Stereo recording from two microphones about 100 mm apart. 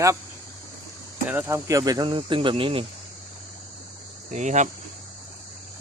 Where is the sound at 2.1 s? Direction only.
60° right (ahead or behind).